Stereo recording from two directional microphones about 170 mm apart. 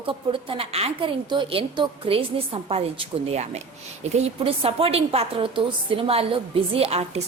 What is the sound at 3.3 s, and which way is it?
A woman's voice, 40° right (ahead or behind).